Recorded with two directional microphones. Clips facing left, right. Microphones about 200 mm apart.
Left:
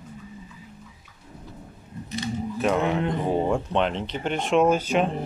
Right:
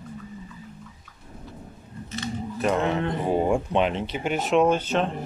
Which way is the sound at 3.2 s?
5° right (ahead or behind).